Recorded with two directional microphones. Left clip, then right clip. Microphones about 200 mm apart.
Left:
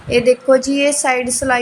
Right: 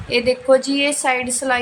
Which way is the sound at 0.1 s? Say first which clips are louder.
Left 3 dB; 15° left (ahead or behind).